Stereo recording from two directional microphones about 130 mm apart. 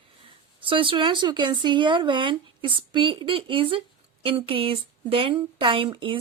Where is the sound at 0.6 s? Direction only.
45° right (ahead or behind).